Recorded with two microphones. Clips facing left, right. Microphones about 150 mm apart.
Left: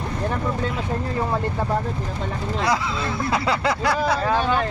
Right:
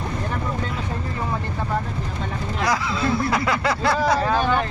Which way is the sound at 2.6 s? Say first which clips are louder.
Right 1 dB; 25° left (ahead or behind).